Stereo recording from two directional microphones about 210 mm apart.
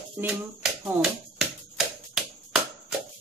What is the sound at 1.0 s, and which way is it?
Finger snapping, centre (ahead or behind).